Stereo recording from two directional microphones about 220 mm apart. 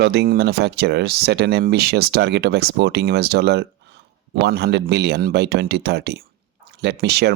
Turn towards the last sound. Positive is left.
turn(degrees=-50)  # may be behind; listen again after turning